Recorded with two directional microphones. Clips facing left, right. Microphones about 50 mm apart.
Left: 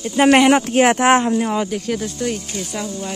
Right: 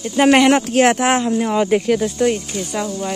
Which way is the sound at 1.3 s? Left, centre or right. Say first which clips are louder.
Right 1 dB; centre.